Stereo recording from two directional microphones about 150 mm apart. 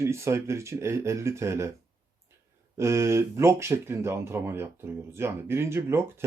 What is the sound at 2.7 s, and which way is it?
Speech, 20° right (ahead or behind).